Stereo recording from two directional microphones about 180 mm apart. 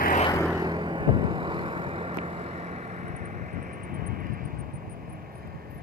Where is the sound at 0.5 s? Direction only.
25° right (ahead or behind); by 4.6 s 50° right (ahead or behind).